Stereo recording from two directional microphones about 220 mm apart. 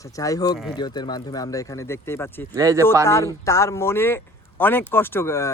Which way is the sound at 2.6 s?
15° right (ahead or behind).